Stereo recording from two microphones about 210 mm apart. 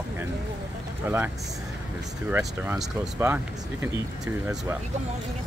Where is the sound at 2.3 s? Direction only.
10° right (ahead or behind).